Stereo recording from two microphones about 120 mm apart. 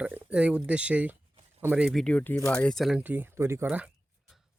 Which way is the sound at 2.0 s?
10° left (ahead or behind).